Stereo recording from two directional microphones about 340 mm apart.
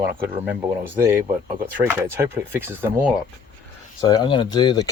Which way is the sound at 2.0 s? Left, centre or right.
Centre.